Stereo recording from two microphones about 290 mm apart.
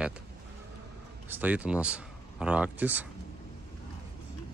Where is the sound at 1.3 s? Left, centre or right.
Centre.